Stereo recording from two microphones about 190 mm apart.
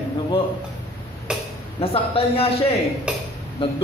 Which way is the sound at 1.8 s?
30° left (ahead or behind).